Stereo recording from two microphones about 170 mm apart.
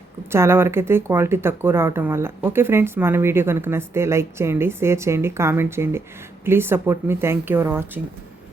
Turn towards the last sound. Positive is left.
turn(degrees=-10)  # may be behind; listen again after turning